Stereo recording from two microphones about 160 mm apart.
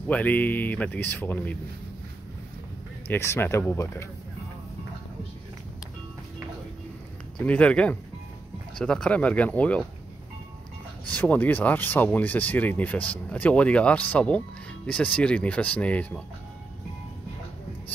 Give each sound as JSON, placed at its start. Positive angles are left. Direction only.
{"t": 0.1, "sound": "speech", "side_deg": 10}
{"t": 3.1, "sound": "speech", "side_deg": 15}
{"t": 7.4, "sound": "speech", "side_deg": 10}
{"t": 11.1, "sound": "speech", "side_deg": 10}